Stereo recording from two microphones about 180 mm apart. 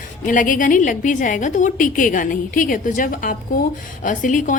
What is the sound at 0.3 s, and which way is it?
A woman's voice, 50° left (ahead or behind).